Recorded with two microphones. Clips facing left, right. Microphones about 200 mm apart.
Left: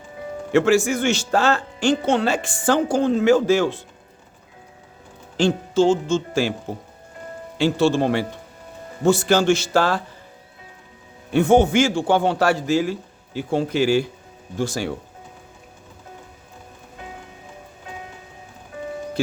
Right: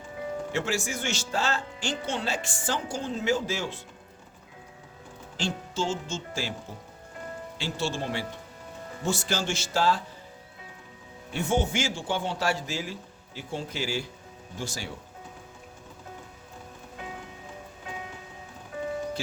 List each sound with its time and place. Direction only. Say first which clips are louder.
0.5 s speech: left 16 dB; 60° left (ahead or behind)
5.4 s speech: left 13 dB; 60° left (ahead or behind)
11.3 s speech: left 12 dB; 60° left (ahead or behind)